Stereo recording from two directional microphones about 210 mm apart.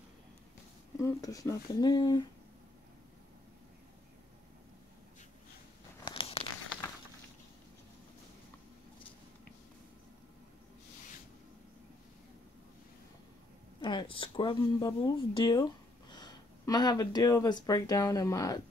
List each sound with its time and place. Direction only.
0.9 s speech: 15° left (ahead or behind)
6.0 s a sound: 25° left (ahead or behind)
13.7 s speech: 25° left (ahead or behind)